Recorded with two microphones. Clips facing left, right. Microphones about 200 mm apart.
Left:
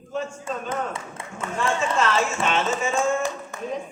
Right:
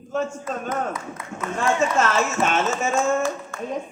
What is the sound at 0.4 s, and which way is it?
A man's voice, 30° left (ahead or behind).